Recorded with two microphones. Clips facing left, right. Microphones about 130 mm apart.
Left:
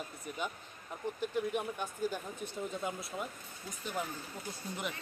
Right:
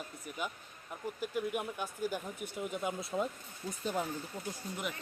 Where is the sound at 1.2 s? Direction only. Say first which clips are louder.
Left 1 dB; 10° right (ahead or behind); by 4.1 s 30° right (ahead or behind).